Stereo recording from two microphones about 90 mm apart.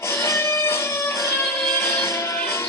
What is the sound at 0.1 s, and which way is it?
Music, 30° left (ahead or behind).